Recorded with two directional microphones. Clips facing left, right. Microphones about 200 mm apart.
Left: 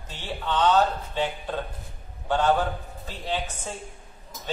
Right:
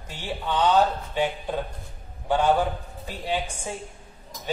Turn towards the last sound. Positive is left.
turn(degrees=-10)  # may be behind; listen again after turning